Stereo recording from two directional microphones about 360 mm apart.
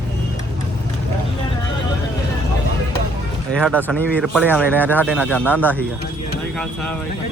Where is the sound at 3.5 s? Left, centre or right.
Centre.